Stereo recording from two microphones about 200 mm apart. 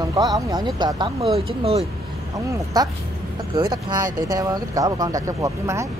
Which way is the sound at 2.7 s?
20° right (ahead or behind).